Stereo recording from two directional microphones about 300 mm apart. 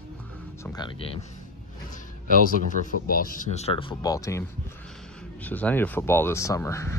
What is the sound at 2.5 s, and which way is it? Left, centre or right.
Speech, left.